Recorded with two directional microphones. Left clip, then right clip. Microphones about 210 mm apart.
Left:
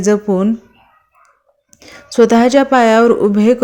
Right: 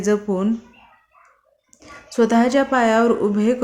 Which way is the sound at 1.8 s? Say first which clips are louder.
Left 8 dB; 35° left (ahead or behind).